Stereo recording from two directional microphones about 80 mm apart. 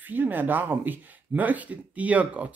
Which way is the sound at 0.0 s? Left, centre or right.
Right.